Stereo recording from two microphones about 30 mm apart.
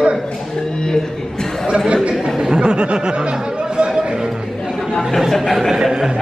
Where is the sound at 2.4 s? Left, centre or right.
Right.